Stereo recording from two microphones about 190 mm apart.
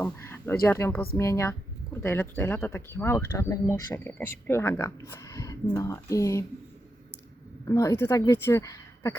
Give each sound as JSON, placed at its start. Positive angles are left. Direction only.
{"t": 0.0, "sound": "speech", "side_deg": 15}
{"t": 7.6, "sound": "speech", "side_deg": 15}